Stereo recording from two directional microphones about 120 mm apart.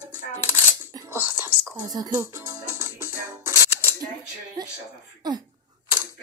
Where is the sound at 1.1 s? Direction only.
20° right (ahead or behind).